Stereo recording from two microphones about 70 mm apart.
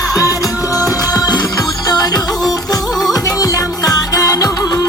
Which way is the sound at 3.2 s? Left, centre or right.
Left.